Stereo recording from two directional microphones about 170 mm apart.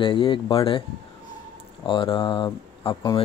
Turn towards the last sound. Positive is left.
turn(degrees=20)  # may be behind; listen again after turning